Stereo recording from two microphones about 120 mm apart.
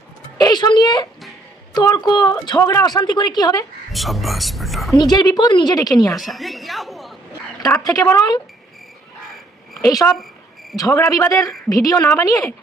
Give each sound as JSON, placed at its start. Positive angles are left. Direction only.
{"t": 0.3, "sound": "a woman's voice", "side_deg": 35}
{"t": 3.9, "sound": "speech", "side_deg": 0}
{"t": 4.9, "sound": "a woman's voice", "side_deg": 35}
{"t": 6.1, "sound": "a woman's voice", "side_deg": 0}
{"t": 7.6, "sound": "a woman's voice", "side_deg": 30}
{"t": 9.8, "sound": "a woman's voice", "side_deg": 30}